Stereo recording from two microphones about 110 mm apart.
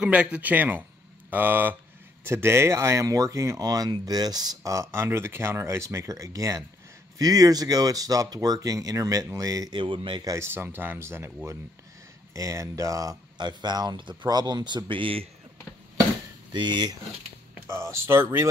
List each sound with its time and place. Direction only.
0.0 s speech: 10° right (ahead or behind); by 9.8 s 30° right (ahead or behind)
9.8 s speech: 50° right (ahead or behind)
10.2 s speech: 25° right (ahead or behind)
12.4 s speech: 30° right (ahead or behind); by 15.2 s 55° right (ahead or behind)
16.5 s speech: 45° right (ahead or behind)
17.6 s speech: 25° right (ahead or behind)